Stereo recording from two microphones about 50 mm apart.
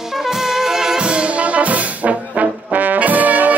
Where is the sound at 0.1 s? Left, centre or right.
Centre.